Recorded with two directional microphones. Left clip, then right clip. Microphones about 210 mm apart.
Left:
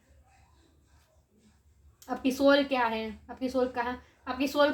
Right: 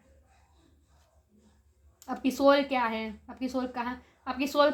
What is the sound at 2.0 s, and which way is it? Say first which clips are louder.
Speech: even; 35° right (ahead or behind).